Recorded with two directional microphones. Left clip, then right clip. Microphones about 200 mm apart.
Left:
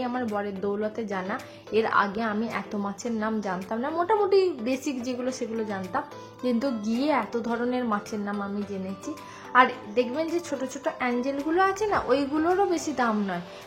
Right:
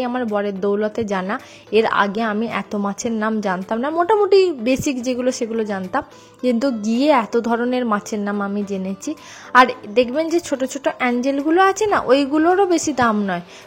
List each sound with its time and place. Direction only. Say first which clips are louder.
0.0 s speech: right 8 dB; 40° right (ahead or behind)
9.5 s speech: right 7 dB; 40° right (ahead or behind)